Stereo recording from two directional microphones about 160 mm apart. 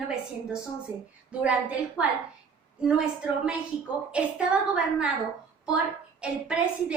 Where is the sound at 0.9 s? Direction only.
15° right (ahead or behind).